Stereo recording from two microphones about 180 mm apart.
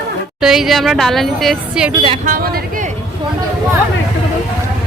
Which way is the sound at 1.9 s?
25° right (ahead or behind).